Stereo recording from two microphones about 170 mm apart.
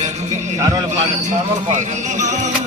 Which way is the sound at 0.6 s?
20° right (ahead or behind).